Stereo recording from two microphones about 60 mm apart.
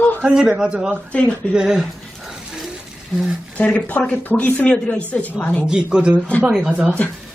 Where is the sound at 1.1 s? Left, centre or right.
Centre.